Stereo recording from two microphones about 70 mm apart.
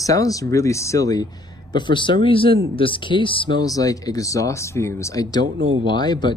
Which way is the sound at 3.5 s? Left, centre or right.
Left.